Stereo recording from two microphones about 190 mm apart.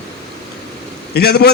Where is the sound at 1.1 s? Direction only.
60° left (ahead or behind).